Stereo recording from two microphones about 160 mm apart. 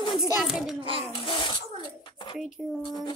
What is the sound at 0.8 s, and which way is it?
Speech, 35° right (ahead or behind).